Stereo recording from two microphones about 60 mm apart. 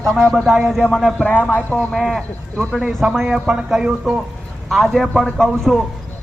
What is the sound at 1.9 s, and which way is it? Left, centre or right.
Speech, centre.